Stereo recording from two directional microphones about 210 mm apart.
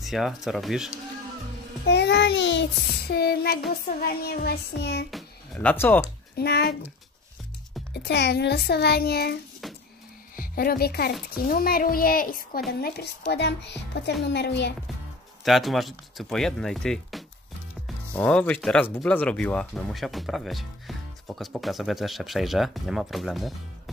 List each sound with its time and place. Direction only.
0.0 s speech: centre (ahead or behind)
1.9 s child singing: 55° left (ahead or behind)
3.8 s a child's voice: 45° left (ahead or behind)
5.1 s music: 5° left (ahead or behind)
6.3 s a child's voice: 50° left (ahead or behind)
7.9 s a child's voice: 50° left (ahead or behind)
14.2 s child singing: 55° left (ahead or behind)
15.4 s speech: centre (ahead or behind)